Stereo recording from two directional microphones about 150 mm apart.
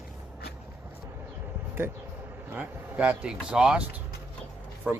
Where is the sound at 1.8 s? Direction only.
15° right (ahead or behind).